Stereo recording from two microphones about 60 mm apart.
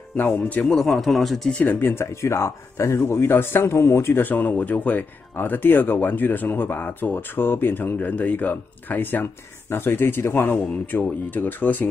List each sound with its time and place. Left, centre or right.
0.2 s a man's voice: left
0.7 s speech: centre
1.5 s speech: left
2.2 s speech: left